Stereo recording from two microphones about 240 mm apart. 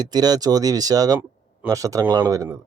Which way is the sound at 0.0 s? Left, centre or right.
Centre.